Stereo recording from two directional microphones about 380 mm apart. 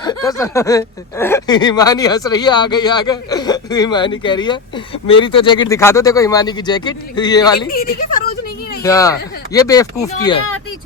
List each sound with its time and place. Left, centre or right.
0.0 s speech: centre
7.7 s speech: left
8.8 s speech: centre